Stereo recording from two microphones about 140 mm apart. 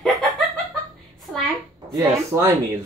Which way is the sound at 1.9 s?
25° right (ahead or behind).